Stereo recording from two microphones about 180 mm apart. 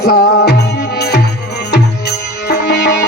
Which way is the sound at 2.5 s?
65° left (ahead or behind).